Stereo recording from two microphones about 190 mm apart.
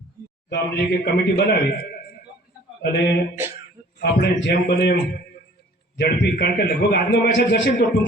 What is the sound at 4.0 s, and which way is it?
A man's voice, 55° left (ahead or behind).